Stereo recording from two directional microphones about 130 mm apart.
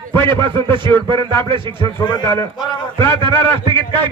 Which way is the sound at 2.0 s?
35° left (ahead or behind).